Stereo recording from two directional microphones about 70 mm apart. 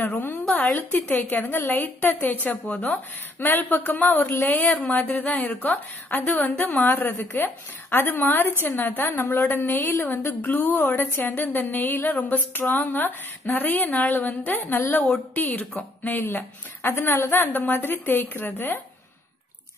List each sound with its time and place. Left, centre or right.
0.0 s a woman's voice: left